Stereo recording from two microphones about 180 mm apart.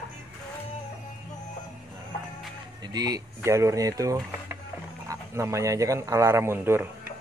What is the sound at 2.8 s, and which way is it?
A man's voice, 20° right (ahead or behind).